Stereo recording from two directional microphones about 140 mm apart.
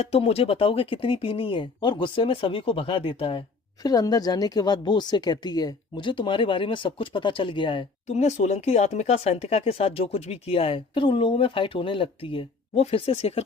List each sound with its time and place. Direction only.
0.0 s speech: 45° left (ahead or behind)
3.8 s speech: 25° left (ahead or behind)
8.0 s speech: 55° left (ahead or behind)